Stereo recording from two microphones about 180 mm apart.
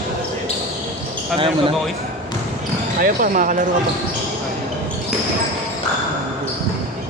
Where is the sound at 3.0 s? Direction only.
50° right (ahead or behind).